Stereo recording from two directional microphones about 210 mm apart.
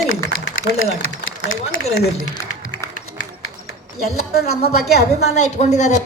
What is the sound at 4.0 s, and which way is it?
A woman's voice, 50° left (ahead or behind).